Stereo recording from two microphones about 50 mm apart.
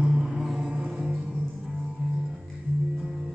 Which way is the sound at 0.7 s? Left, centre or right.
Right.